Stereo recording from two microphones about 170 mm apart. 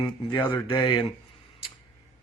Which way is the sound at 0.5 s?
30° left (ahead or behind).